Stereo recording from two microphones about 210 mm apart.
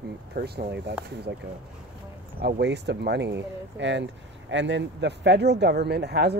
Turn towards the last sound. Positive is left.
turn(degrees=-50)  # may be behind; listen again after turning